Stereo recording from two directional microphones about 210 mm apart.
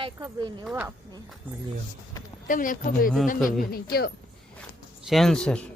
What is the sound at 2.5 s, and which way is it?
Speech, 40° left (ahead or behind).